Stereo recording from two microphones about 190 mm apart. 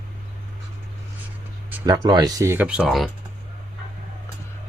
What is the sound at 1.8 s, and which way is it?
Speech, 20° right (ahead or behind).